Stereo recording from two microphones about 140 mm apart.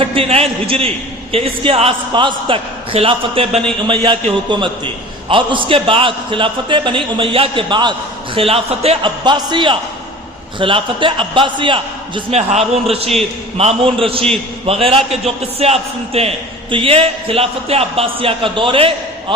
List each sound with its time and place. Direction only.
0.0 s a man's voice: 40° right (ahead or behind)
8.4 s a man's voice: 45° right (ahead or behind)
9.2 s a man's voice: 30° right (ahead or behind)
12.4 s a man's voice: 50° right (ahead or behind)